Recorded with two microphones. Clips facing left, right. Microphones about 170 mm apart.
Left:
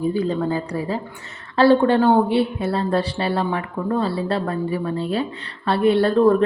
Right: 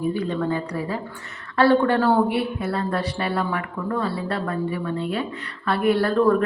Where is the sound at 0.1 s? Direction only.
30° left (ahead or behind).